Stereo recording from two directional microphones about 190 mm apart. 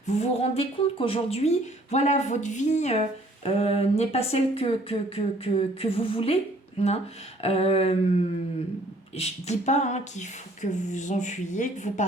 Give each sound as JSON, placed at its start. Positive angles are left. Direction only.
{"t": 0.0, "sound": "a woman's voice", "side_deg": 35}
{"t": 9.1, "sound": "a woman's voice", "side_deg": 35}